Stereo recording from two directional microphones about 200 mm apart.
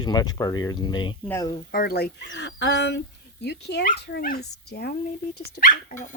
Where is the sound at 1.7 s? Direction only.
50° left (ahead or behind).